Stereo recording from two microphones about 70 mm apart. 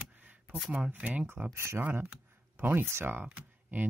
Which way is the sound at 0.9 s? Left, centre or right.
Right.